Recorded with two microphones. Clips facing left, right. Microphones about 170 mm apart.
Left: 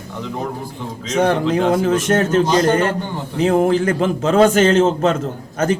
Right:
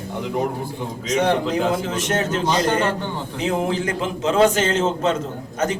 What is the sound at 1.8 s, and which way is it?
Speech, 50° left (ahead or behind).